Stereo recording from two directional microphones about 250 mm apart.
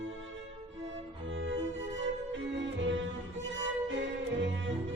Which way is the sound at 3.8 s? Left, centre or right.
Right.